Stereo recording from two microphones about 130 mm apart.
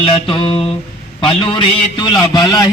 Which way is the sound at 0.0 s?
40° left (ahead or behind).